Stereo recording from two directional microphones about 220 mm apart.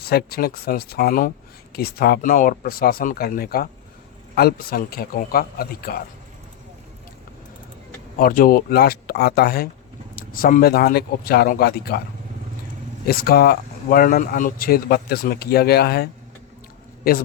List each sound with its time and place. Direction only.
0.0 s speech: 45° left (ahead or behind)
8.2 s speech: 40° left (ahead or behind)
13.1 s a man's voice: 45° left (ahead or behind)